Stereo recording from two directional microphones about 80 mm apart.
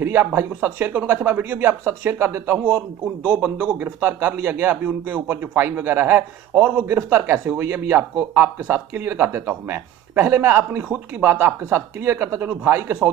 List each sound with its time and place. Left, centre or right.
0.0 s a sound: right
0.7 s speech: right
3.3 s speech: centre